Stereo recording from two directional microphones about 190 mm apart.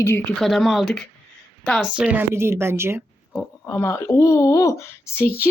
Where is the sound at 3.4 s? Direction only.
15° left (ahead or behind).